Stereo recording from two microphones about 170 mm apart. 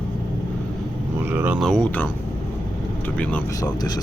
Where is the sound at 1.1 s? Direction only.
10° right (ahead or behind).